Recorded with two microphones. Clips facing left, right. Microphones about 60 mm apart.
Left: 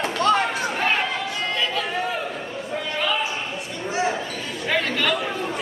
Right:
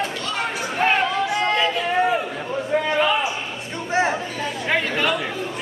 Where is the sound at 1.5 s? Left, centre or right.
Right.